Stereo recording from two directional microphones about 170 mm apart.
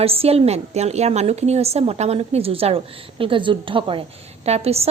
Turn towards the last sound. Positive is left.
turn(degrees=-35)  # may be behind; listen again after turning